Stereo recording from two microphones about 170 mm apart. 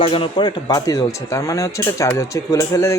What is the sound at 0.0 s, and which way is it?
Speech, 30° left (ahead or behind).